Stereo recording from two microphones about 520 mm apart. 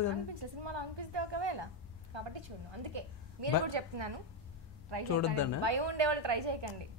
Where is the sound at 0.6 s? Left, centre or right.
Right.